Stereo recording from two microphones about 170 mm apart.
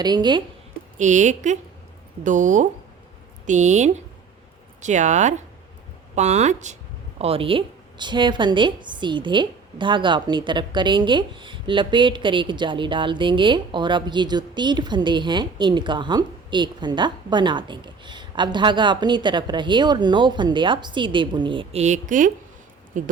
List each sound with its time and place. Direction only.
0.0 s a woman's voice: 25° right (ahead or behind)
0.9 s a woman's voice: 45° right (ahead or behind)